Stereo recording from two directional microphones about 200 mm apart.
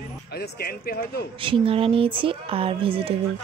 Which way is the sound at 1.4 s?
25° right (ahead or behind).